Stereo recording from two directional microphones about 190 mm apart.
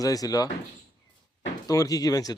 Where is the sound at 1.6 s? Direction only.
20° left (ahead or behind).